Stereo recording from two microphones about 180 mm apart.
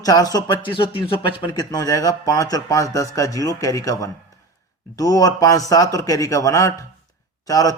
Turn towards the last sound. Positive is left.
turn(degrees=20)  # may be behind; listen again after turning